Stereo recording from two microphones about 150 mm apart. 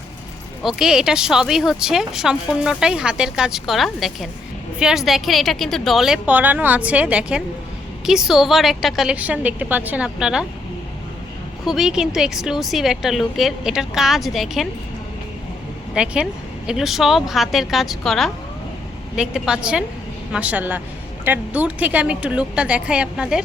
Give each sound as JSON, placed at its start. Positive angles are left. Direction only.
{"t": 0.8, "sound": "speech", "side_deg": -5}
{"t": 11.6, "sound": "speech", "side_deg": 0}
{"t": 16.0, "sound": "speech", "side_deg": -5}